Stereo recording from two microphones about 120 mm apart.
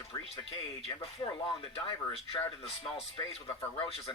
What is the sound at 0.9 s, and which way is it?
Speech, 45° left (ahead or behind).